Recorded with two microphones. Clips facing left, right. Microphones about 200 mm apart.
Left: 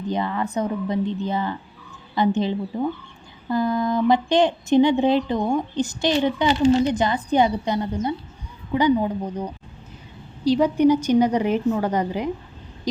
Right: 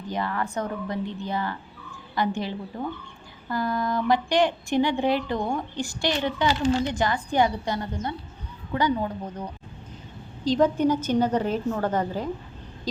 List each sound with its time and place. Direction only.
0.1 s a woman's voice: 20° left (ahead or behind)